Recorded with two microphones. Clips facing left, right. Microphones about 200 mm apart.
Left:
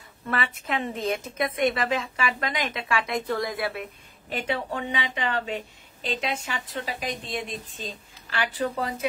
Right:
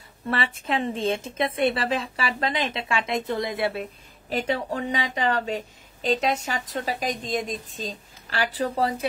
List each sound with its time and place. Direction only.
0.3 s a woman's voice: 30° right (ahead or behind)
4.3 s a woman's voice: 40° right (ahead or behind)